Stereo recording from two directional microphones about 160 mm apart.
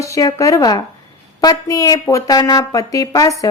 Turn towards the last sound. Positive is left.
turn(degrees=20)  # may be behind; listen again after turning